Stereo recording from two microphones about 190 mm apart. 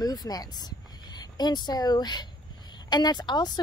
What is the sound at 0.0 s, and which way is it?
Speech, 20° left (ahead or behind).